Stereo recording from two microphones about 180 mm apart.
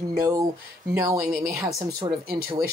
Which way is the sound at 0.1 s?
20° right (ahead or behind).